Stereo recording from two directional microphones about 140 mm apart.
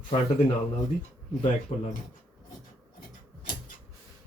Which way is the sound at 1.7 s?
45° left (ahead or behind).